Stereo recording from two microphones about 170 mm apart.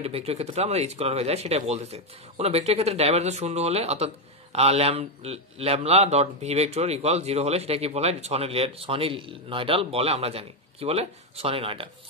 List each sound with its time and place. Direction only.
0.0 s speech: 35° right (ahead or behind)